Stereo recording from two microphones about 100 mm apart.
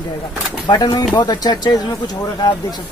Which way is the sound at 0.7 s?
45° left (ahead or behind).